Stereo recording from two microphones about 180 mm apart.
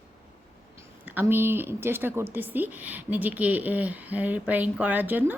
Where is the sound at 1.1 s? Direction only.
10° right (ahead or behind).